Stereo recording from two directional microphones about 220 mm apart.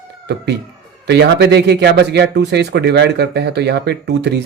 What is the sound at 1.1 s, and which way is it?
Speech, 50° right (ahead or behind).